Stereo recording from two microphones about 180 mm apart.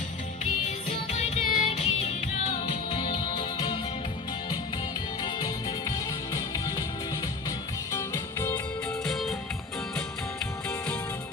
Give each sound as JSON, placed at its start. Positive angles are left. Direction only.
{"t": 0.4, "sound": "music", "side_deg": 40}
{"t": 5.2, "sound": "music", "side_deg": 20}
{"t": 7.9, "sound": "music", "side_deg": 15}
{"t": 9.0, "sound": "music", "side_deg": 0}